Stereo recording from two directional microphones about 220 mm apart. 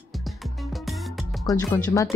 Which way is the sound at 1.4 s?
15° left (ahead or behind).